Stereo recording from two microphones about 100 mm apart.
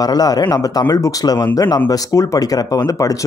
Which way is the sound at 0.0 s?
40° left (ahead or behind).